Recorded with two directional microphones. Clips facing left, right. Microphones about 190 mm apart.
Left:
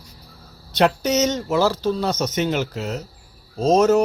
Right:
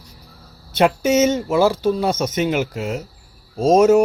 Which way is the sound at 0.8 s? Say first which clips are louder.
Right 3 dB; 10° right (ahead or behind).